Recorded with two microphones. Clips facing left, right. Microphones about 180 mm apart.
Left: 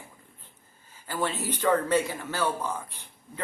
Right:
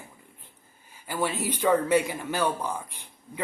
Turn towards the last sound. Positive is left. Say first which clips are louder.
# right 2 dB
turn(degrees=-10)  # may be behind; listen again after turning